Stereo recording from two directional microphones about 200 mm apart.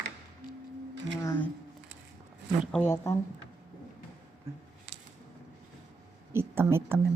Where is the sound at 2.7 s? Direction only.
5° left (ahead or behind).